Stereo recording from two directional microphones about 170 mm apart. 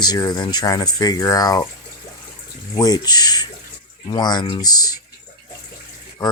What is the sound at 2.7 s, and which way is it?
Speech, 20° left (ahead or behind).